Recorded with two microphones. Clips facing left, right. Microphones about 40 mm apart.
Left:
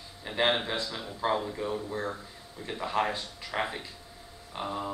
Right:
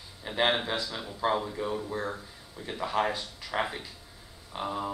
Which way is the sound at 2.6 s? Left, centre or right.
Right.